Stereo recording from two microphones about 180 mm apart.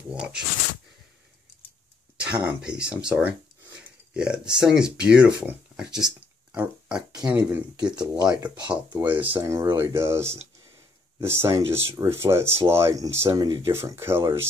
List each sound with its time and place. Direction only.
0.1 s speech: 5° right (ahead or behind)
2.1 s speech: 5° right (ahead or behind)
7.9 s speech: 20° right (ahead or behind)
8.6 s speech: 10° right (ahead or behind)